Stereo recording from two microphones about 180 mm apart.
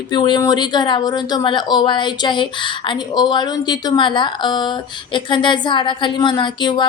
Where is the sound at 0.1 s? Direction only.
25° left (ahead or behind).